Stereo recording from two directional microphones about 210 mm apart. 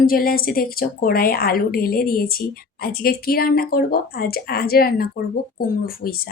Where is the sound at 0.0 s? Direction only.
45° left (ahead or behind).